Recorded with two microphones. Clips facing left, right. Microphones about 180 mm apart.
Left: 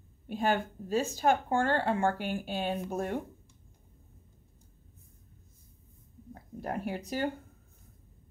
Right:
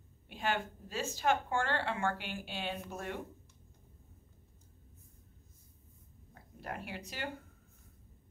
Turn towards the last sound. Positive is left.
turn(degrees=45)  # may be behind; listen again after turning